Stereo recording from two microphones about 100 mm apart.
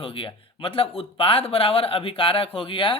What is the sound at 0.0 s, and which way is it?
Speech, 60° left (ahead or behind).